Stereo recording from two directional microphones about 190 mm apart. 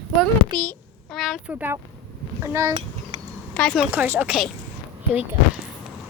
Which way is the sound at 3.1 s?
40° right (ahead or behind).